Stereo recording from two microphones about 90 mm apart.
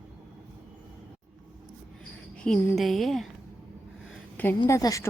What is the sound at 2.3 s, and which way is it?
Cricket, 10° left (ahead or behind).